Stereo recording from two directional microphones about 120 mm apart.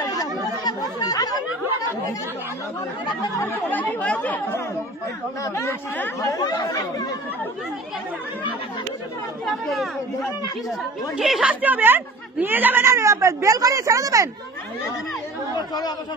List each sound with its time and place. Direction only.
0.0 s chatter: 30° left (ahead or behind)
3.2 s speech: 20° left (ahead or behind)
5.4 s speech: 25° left (ahead or behind)
6.2 s speech: 30° left (ahead or behind)
9.5 s a woman's voice: centre (ahead or behind)
11.6 s speech: 15° right (ahead or behind)
15.5 s speech: 35° left (ahead or behind)